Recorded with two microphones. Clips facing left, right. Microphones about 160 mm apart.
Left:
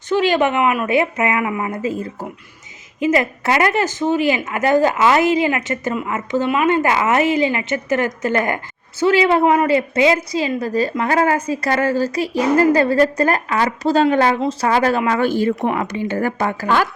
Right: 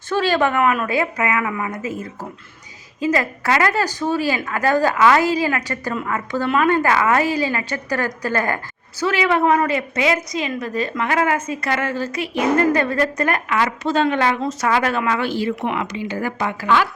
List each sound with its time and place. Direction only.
0.1 s a woman's voice: 20° left (ahead or behind); by 16.9 s 45° left (ahead or behind)